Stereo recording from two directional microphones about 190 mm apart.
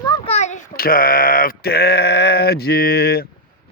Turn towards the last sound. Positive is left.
turn(degrees=55)  # may be behind; listen again after turning